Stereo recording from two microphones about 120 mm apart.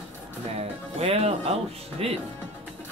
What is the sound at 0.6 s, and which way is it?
Music, 55° right (ahead or behind).